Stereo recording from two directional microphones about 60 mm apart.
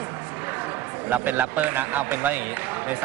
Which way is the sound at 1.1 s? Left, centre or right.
Right.